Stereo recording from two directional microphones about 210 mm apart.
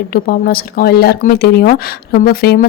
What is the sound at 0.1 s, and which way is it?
Speech, 45° left (ahead or behind).